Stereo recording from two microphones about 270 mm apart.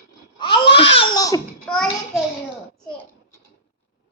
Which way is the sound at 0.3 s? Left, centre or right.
Centre.